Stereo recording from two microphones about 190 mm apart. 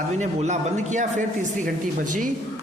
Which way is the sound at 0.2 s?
40° right (ahead or behind).